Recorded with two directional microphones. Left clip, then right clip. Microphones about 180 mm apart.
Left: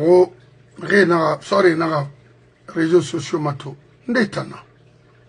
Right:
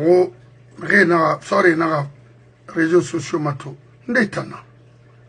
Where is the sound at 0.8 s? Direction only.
Centre (ahead or behind).